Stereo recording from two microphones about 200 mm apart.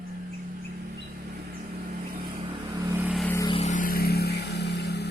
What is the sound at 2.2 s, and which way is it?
Vehicle, 25° right (ahead or behind).